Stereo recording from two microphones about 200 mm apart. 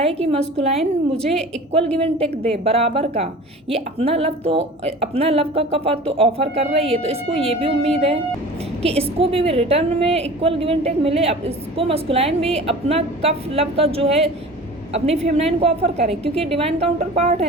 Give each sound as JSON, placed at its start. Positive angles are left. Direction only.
{"t": 0.0, "sound": "a woman's voice", "side_deg": -30}
{"t": 2.0, "sound": "a woman's voice", "side_deg": -30}